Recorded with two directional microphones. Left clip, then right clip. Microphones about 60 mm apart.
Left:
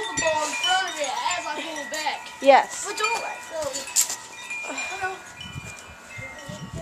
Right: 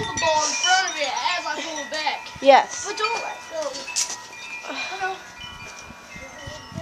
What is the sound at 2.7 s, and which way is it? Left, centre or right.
Speech, centre.